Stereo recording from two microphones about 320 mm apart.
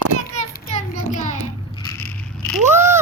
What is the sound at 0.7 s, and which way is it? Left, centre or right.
Child singing, centre.